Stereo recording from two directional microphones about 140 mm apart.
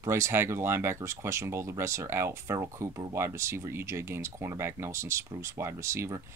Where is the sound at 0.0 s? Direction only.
20° right (ahead or behind).